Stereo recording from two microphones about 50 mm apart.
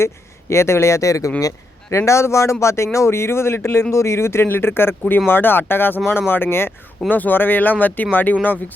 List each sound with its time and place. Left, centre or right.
0.5 s speech: left
1.9 s speech: left
3.9 s speech: left
4.4 s speech: left
7.1 s speech: left